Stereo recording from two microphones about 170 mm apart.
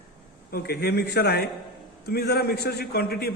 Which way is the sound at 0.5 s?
65° left (ahead or behind).